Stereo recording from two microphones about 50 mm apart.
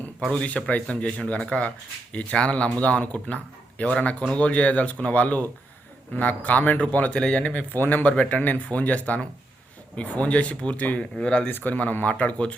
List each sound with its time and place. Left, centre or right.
0.2 s speech: centre
0.9 s speech: left
7.5 s speech: left
10.8 s speech: left
11.2 s speech: centre
11.4 s speech: left